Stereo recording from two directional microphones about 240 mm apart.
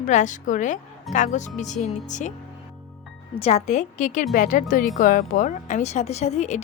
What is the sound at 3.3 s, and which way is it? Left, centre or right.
A woman's voice, left.